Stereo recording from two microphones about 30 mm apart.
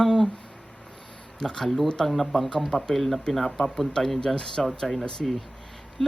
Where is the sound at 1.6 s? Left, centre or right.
Centre.